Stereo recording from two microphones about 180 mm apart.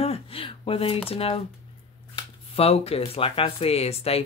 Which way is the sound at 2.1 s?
35° left (ahead or behind).